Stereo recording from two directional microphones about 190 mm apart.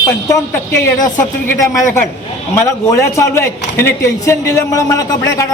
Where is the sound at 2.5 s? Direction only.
15° left (ahead or behind).